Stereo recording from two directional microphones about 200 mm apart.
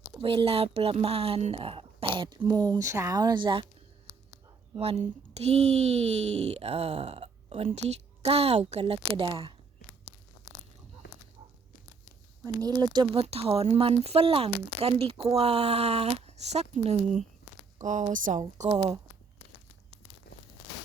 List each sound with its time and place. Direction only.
0.2 s speech: 25° right (ahead or behind)
4.7 s speech: 30° right (ahead or behind)
12.5 s speech: 20° right (ahead or behind); by 18.3 s 40° right (ahead or behind)